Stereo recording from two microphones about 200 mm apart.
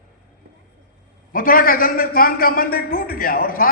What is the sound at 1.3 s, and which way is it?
A man's voice, 45° left (ahead or behind).